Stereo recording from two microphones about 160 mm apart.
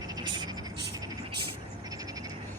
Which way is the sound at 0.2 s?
30° right (ahead or behind).